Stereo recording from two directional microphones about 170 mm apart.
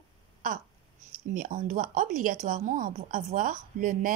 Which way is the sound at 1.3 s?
50° right (ahead or behind).